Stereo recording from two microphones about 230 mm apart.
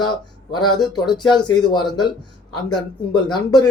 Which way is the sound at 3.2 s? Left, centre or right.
Centre.